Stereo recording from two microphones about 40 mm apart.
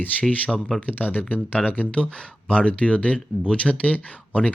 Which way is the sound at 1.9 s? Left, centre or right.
Left.